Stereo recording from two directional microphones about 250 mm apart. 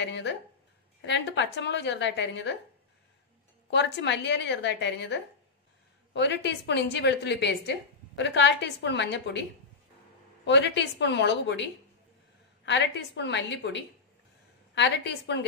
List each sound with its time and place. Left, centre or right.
0.0 s a sound: left
1.0 s a woman's voice: left
3.7 s a woman's voice: left